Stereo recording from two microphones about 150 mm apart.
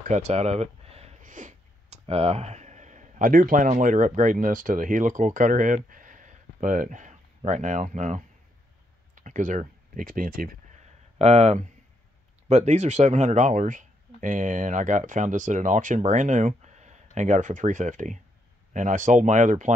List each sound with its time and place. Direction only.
0.1 s speech: 45° right (ahead or behind)
1.2 s a sound: 60° right (ahead or behind)
2.0 s speech: 45° right (ahead or behind); by 10.5 s 75° right (ahead or behind)
11.1 s speech: 45° right (ahead or behind)